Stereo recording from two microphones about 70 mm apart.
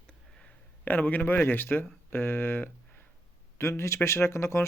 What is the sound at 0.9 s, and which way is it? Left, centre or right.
Speech, left.